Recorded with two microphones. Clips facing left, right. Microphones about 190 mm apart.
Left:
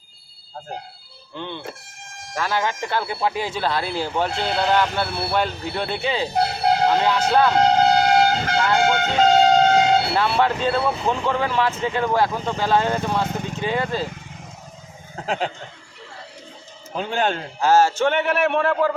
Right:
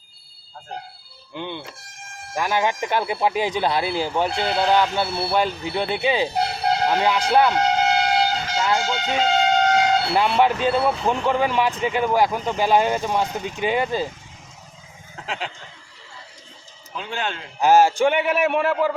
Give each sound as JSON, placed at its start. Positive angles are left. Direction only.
{"t": 1.4, "sound": "speech", "side_deg": -15}
{"t": 7.8, "sound": "train", "side_deg": 35}
{"t": 8.7, "sound": "speech", "side_deg": 55}
{"t": 9.4, "sound": "train", "side_deg": 35}
{"t": 10.2, "sound": "speech", "side_deg": -15}
{"t": 15.1, "sound": "speech", "side_deg": 45}
{"t": 16.9, "sound": "speech", "side_deg": 45}
{"t": 17.6, "sound": "speech", "side_deg": -15}